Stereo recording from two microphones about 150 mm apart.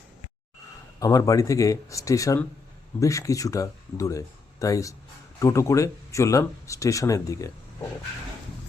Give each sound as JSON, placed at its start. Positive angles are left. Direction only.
{"t": 0.9, "sound": "speech", "side_deg": 25}